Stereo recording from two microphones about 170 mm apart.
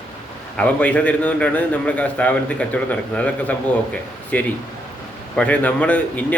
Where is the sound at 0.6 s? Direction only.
10° left (ahead or behind).